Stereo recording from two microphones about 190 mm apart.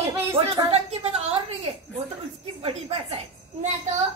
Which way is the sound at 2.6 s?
30° right (ahead or behind).